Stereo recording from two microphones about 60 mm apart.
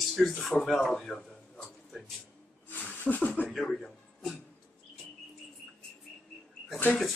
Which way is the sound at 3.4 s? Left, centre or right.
Centre.